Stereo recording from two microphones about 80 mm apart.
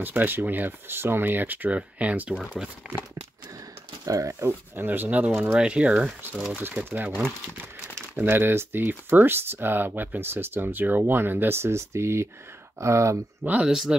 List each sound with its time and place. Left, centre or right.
0.0 s speech: right
4.0 s speech: right; by 6.4 s centre
6.6 s speech: right
13.5 s speech: centre